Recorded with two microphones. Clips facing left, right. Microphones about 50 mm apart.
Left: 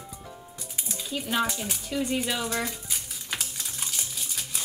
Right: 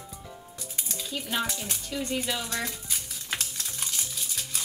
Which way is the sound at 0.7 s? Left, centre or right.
Centre.